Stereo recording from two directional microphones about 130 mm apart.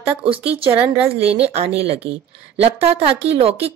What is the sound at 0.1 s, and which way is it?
A woman's voice, 45° right (ahead or behind).